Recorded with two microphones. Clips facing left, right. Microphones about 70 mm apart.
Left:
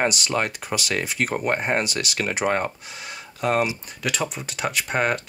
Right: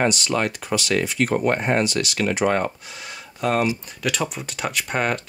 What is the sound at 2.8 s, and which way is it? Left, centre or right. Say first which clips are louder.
Speech: even; centre.